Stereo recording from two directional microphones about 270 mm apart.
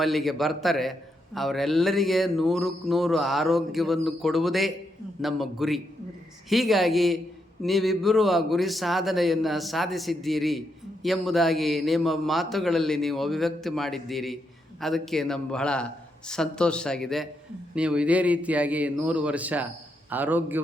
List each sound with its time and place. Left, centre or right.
0.0 s a man's voice: centre